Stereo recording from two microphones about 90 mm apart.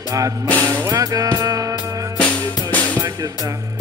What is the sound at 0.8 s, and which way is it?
Music, 40° right (ahead or behind).